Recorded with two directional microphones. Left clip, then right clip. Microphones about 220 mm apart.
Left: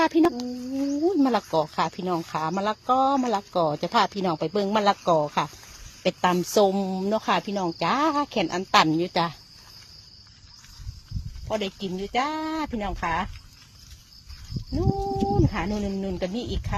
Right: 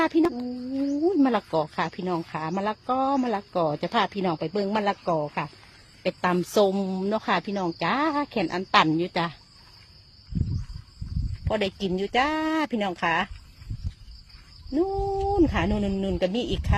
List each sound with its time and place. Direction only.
0.0 s speech: 5° left (ahead or behind)
11.4 s speech: 40° right (ahead or behind)
15.4 s speech: 45° right (ahead or behind)